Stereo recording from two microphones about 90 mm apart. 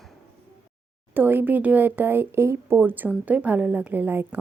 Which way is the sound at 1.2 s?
20° right (ahead or behind).